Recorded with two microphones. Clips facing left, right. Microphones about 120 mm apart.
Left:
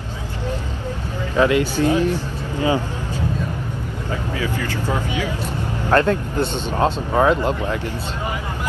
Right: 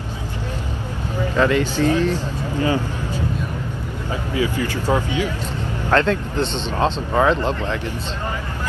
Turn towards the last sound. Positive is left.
turn(degrees=10)  # may be behind; listen again after turning